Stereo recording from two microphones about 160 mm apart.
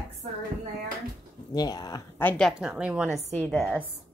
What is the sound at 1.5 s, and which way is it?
Speech, 25° left (ahead or behind).